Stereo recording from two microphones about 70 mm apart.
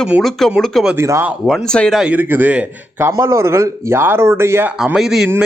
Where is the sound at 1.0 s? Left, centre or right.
Right.